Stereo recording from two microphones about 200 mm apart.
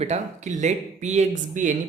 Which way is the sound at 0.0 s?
35° right (ahead or behind).